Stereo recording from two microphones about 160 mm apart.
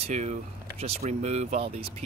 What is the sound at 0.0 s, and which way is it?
Speech, 45° right (ahead or behind).